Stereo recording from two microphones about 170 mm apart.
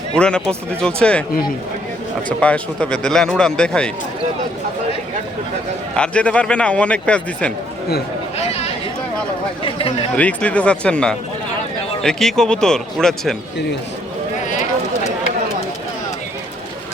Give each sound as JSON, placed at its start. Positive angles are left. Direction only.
{"t": 0.1, "sound": "speech", "side_deg": 5}
{"t": 2.4, "sound": "speech", "side_deg": 10}
{"t": 6.0, "sound": "speech", "side_deg": 5}
{"t": 8.4, "sound": "a sound", "side_deg": 40}
{"t": 9.6, "sound": "speech", "side_deg": 30}
{"t": 10.2, "sound": "speech", "side_deg": 10}